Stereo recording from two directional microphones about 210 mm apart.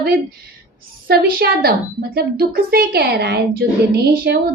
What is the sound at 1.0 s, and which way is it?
A child's voice, 45° right (ahead or behind).